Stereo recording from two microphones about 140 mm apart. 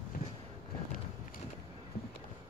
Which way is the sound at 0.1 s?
90° left.